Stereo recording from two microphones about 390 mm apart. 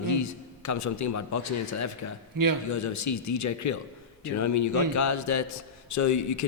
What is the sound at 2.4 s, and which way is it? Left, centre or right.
Speech, right.